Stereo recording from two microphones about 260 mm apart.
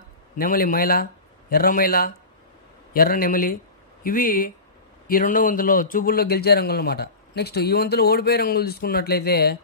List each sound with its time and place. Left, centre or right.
0.4 s a man's voice: left